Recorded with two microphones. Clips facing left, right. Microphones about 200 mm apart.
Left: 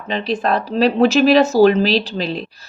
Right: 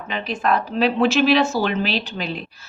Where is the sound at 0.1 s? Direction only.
35° left (ahead or behind).